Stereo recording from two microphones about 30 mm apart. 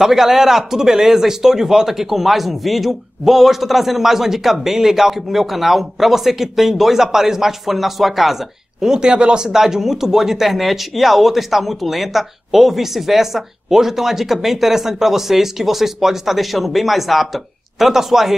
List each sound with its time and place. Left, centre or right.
0.0 s speech: centre
8.8 s speech: right
9.5 s speech: centre